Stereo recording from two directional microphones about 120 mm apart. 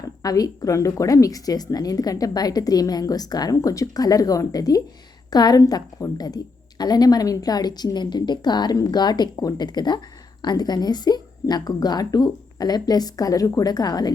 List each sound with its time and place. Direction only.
0.0 s speech: 30° left (ahead or behind)